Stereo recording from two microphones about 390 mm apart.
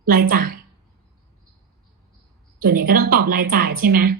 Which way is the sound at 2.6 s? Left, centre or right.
Right.